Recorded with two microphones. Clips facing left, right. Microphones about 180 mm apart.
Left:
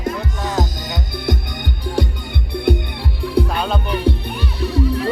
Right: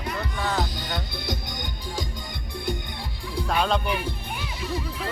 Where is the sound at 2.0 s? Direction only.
65° left (ahead or behind).